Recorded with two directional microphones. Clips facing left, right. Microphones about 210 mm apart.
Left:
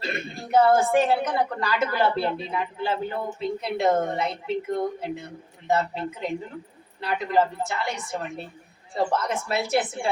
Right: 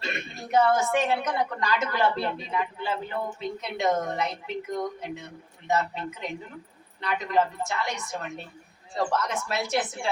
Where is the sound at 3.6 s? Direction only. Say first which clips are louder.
Left 3 dB; 30° left (ahead or behind).